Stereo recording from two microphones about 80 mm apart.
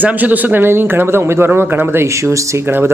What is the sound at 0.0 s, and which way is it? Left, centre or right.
Speech, right.